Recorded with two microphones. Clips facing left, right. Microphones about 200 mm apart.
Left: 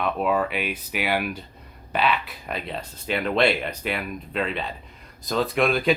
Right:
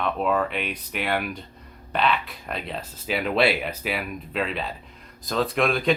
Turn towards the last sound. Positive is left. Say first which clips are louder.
# left 1 dB
turn(degrees=0)  # may be behind; listen again after turning